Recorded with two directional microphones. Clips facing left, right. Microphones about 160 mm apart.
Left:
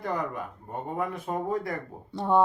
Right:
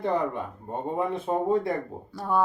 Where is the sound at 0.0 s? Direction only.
25° right (ahead or behind).